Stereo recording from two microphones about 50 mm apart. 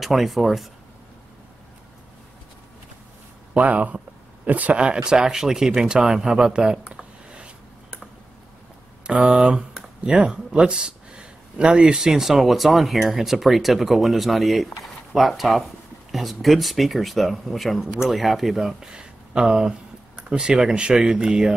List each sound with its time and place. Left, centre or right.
0.0 s speech: centre
3.5 s speech: right
4.7 s speech: centre
7.2 s a sound: right
9.0 s speech: right
12.1 s speech: centre
18.8 s speech: centre